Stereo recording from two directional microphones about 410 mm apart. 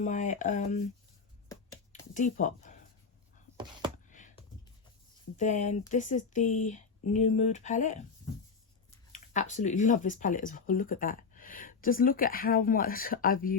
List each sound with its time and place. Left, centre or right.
0.0 s speech: centre
1.5 s a sound: centre
3.6 s a sound: centre
4.1 s computer keyboard: centre
5.4 s speech: centre
9.1 s speech: centre